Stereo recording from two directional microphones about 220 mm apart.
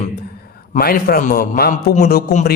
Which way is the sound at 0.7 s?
45° left (ahead or behind).